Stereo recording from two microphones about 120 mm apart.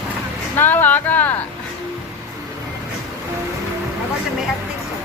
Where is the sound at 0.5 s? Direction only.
15° left (ahead or behind).